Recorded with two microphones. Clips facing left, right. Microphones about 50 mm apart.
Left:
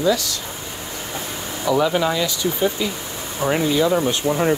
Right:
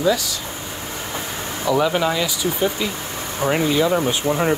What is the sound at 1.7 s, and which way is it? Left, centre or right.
Speech, centre.